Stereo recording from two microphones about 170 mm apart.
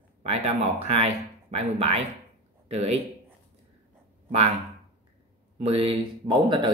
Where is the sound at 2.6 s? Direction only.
40° right (ahead or behind).